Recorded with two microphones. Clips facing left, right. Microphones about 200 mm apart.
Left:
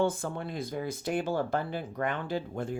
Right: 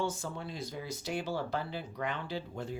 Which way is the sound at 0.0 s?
55° left (ahead or behind).